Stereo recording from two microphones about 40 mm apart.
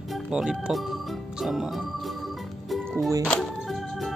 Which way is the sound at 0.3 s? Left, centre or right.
Right.